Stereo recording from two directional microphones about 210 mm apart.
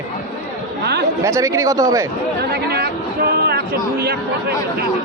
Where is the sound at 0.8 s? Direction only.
50° right (ahead or behind).